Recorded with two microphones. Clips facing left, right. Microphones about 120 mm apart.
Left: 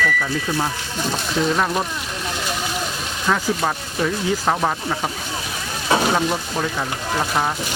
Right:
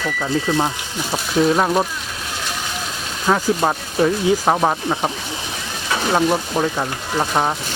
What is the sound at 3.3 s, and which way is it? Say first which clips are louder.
Speech: right 4 dB; 25° right (ahead or behind).